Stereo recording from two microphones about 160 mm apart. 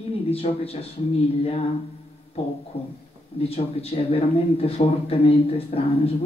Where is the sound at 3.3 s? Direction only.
40° left (ahead or behind).